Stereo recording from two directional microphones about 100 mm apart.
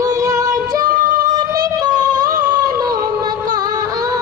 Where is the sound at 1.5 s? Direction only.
40° right (ahead or behind).